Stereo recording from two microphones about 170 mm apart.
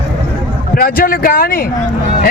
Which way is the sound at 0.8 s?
60° left (ahead or behind).